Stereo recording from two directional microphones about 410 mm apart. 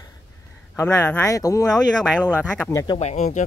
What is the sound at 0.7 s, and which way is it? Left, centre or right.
Speech, centre.